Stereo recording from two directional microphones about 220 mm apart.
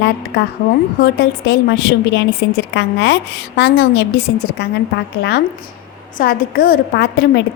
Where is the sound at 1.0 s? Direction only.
50° left (ahead or behind).